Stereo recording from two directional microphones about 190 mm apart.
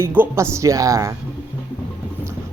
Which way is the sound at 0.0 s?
10° right (ahead or behind).